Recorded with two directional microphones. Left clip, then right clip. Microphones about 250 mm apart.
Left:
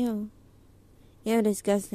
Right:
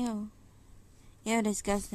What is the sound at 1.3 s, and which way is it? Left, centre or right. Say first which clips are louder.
Speech: left 5 dB; centre.